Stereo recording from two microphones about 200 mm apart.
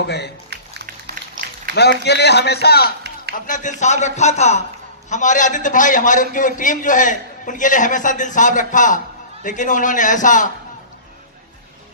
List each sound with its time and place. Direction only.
0.0 s a man's voice: 55° left (ahead or behind)
1.0 s music: 50° right (ahead or behind)
1.7 s a man's voice: 55° left (ahead or behind)
3.4 s a man's voice: 40° left (ahead or behind)